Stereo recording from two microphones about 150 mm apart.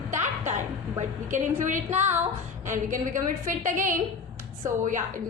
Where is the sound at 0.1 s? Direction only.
55° right (ahead or behind).